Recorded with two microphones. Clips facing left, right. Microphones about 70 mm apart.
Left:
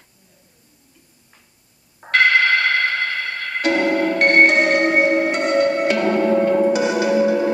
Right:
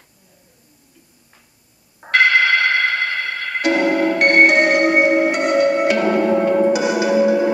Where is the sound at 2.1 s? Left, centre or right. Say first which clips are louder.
Right 1 dB; centre.